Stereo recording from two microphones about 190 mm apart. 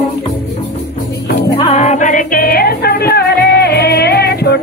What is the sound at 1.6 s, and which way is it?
Music, 35° left (ahead or behind).